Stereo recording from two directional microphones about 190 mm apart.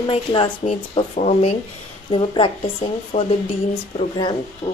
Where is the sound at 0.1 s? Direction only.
30° left (ahead or behind).